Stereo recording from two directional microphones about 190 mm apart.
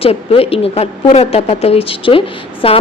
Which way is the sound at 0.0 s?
30° left (ahead or behind).